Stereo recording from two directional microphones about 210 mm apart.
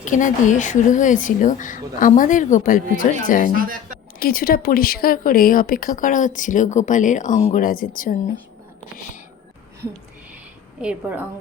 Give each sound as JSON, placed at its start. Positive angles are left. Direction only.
{"t": 0.0, "sound": "speech", "side_deg": 35}
{"t": 3.5, "sound": "speech", "side_deg": -40}
{"t": 4.2, "sound": "speech", "side_deg": 45}
{"t": 10.8, "sound": "a woman's voice", "side_deg": -5}